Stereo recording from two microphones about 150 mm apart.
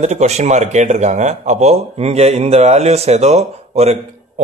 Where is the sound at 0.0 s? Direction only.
50° right (ahead or behind).